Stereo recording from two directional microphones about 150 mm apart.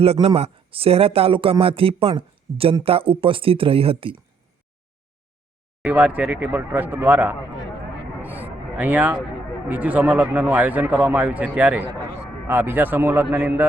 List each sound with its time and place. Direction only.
0.0 s speech: 40° right (ahead or behind)
5.8 s speech: 10° right (ahead or behind)
8.2 s a sound: 10° right (ahead or behind)
9.6 s speech: 10° right (ahead or behind)